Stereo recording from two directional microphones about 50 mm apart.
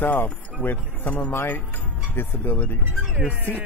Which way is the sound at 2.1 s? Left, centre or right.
Left.